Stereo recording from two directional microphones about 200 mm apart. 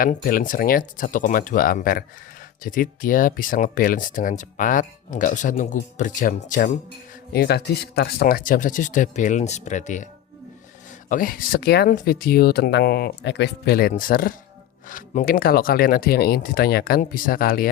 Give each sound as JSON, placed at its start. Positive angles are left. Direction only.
{"t": 0.0, "sound": "speech", "side_deg": 45}
{"t": 7.3, "sound": "speech", "side_deg": 55}
{"t": 11.1, "sound": "speech", "side_deg": 45}